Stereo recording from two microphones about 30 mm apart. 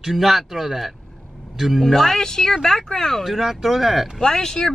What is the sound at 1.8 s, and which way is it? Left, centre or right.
Speech, centre.